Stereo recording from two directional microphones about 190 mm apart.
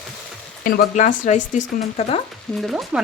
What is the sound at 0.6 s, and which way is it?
Speech, 40° left (ahead or behind).